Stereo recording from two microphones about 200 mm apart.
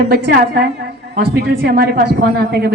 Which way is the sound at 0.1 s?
55° right (ahead or behind).